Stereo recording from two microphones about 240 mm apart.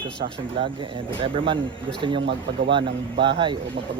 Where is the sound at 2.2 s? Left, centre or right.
Right.